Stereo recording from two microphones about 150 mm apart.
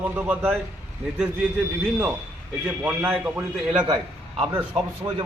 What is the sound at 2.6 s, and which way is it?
Speech, 10° right (ahead or behind).